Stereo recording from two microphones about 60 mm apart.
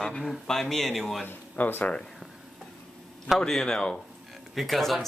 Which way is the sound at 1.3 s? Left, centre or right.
Left.